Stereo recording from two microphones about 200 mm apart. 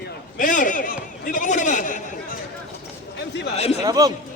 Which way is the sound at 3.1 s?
60° left (ahead or behind).